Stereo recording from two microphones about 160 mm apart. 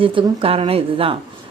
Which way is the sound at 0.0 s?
30° right (ahead or behind).